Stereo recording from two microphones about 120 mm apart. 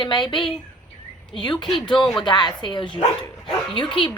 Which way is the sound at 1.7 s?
45° left (ahead or behind).